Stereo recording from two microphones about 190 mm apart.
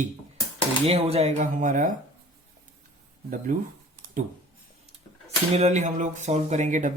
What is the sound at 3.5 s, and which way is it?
Speech, 45° right (ahead or behind).